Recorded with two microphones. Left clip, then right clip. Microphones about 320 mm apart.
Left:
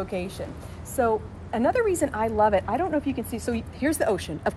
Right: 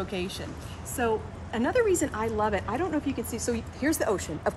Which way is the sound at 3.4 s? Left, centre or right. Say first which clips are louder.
Left 1 dB; centre.